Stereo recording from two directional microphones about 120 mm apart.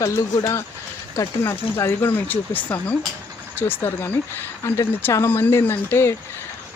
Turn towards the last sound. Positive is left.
turn(degrees=20)  # may be behind; listen again after turning